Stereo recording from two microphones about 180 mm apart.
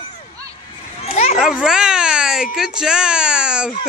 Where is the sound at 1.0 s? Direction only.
40° left (ahead or behind).